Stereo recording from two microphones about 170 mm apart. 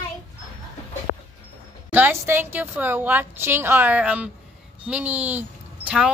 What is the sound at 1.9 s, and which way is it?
A woman's voice, 10° right (ahead or behind).